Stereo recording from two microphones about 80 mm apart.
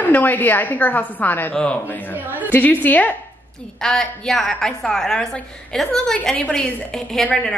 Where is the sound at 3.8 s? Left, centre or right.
Centre.